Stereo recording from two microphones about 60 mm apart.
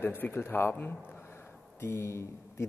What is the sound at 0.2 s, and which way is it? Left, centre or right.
A man's voice, left.